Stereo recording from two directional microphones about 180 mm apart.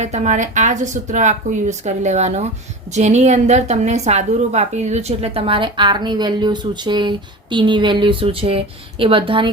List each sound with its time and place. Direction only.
0.0 s a woman's voice: 40° right (ahead or behind)